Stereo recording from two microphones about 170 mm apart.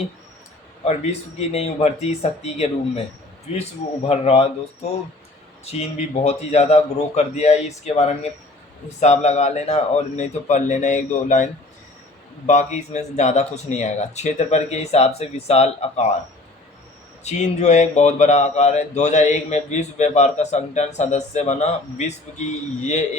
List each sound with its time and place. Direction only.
1.4 s speech: 40° left (ahead or behind)
6.2 s speech: 40° left (ahead or behind)
12.5 s speech: 45° left (ahead or behind)
17.2 s speech: 40° left (ahead or behind)